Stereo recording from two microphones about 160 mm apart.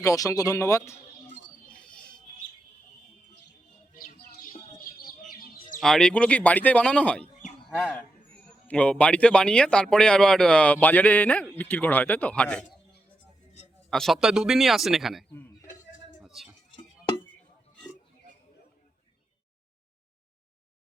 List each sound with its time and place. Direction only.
0.0 s a man's voice: 20° left (ahead or behind)
1.7 s music: 5° left (ahead or behind)
3.9 s bird: 60° left (ahead or behind)
5.8 s speech: 5° left (ahead or behind)
8.6 s speech: 10° left (ahead or behind)
13.9 s speech: centre (ahead or behind)
15.3 s a sound: 10° left (ahead or behind)
16.2 s a sound: centre (ahead or behind)